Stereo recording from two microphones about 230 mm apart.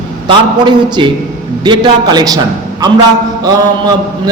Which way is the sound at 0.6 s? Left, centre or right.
Centre.